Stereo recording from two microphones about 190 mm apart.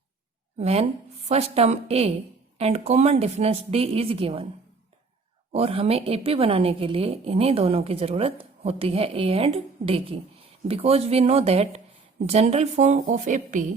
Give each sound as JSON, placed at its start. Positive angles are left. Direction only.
{"t": 0.6, "sound": "a woman's voice", "side_deg": -35}
{"t": 5.5, "sound": "a woman's voice", "side_deg": -30}